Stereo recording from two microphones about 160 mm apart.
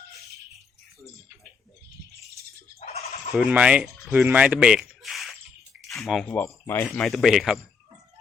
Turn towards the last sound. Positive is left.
turn(degrees=0)  # may be behind; listen again after turning